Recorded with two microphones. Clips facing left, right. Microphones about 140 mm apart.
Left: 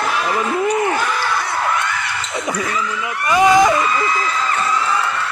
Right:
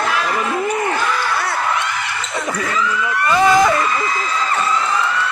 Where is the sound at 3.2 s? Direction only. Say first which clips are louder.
Left 1 dB; 15° left (ahead or behind).